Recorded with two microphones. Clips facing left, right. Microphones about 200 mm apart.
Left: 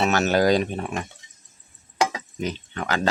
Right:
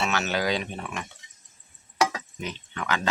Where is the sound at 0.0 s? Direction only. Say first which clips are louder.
Left 7 dB; 40° left (ahead or behind).